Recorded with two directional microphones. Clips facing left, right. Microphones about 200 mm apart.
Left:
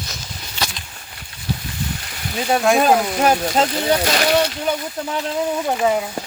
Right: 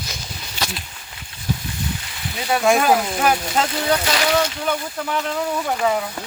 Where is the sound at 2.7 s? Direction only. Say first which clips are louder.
Even; centre (ahead or behind).